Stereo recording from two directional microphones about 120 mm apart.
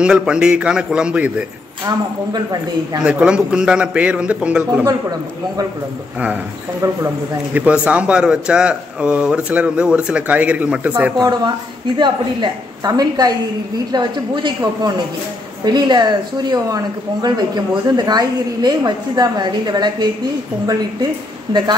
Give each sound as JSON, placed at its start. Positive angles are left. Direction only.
{"t": 0.0, "sound": "speech", "side_deg": -5}
{"t": 2.3, "sound": "speech", "side_deg": -30}
{"t": 3.0, "sound": "speech", "side_deg": -10}
{"t": 7.5, "sound": "speech", "side_deg": -10}
{"t": 11.1, "sound": "speech", "side_deg": -30}